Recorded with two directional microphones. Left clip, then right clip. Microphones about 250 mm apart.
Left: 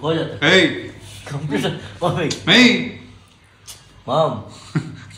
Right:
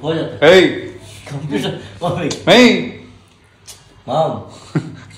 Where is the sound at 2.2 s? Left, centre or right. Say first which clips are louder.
Right 4 dB; centre.